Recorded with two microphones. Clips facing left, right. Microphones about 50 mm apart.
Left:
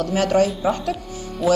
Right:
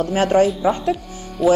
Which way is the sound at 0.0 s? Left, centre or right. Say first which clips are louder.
Right 2 dB; right.